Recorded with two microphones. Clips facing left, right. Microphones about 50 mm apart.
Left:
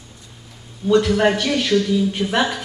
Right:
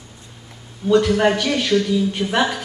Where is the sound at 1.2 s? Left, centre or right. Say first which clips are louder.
Even; centre.